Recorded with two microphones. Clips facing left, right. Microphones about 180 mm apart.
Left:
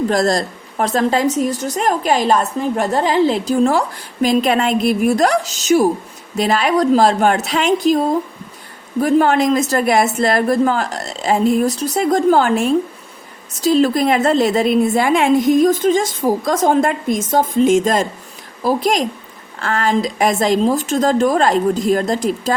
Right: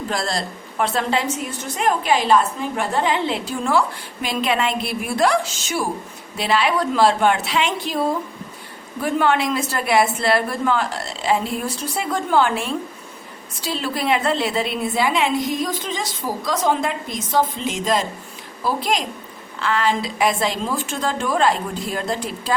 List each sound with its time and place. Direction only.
0.1 s a woman's voice: 45° left (ahead or behind)